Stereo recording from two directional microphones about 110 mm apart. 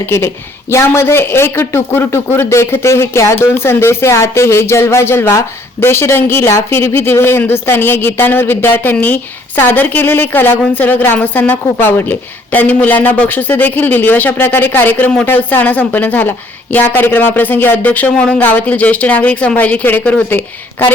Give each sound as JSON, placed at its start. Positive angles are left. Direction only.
{"t": 0.7, "sound": "a man's voice", "side_deg": 25}